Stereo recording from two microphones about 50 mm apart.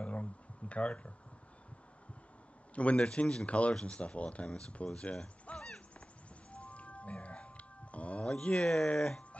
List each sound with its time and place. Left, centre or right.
0.0 s a sound: left
2.7 s speech: left
6.5 s music: left